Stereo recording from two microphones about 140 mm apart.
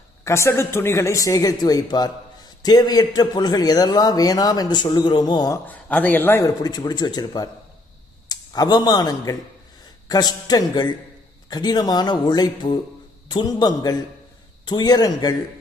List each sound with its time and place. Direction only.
0.3 s speech: 20° left (ahead or behind)
5.6 s a man's voice: 10° left (ahead or behind)
6.4 s speech: 30° left (ahead or behind)